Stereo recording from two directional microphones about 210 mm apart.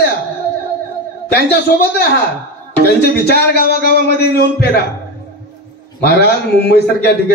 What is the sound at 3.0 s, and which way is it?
A man's voice, 50° left (ahead or behind).